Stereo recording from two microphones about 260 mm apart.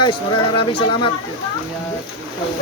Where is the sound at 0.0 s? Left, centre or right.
Centre.